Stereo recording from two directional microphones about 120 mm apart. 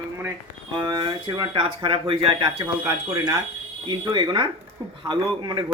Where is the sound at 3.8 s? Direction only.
40° right (ahead or behind).